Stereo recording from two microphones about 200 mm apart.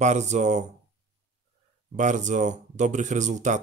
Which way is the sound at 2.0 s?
40° right (ahead or behind).